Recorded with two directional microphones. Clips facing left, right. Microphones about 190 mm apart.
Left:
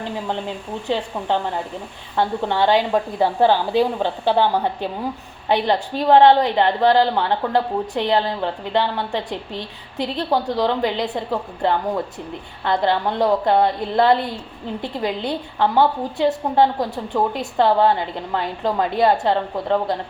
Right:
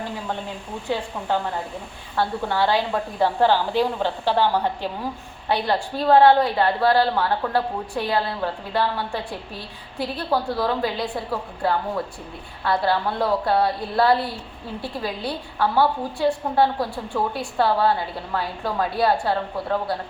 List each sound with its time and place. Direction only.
2.1 s a woman's voice: 20° left (ahead or behind)
12.6 s a woman's voice: 20° left (ahead or behind)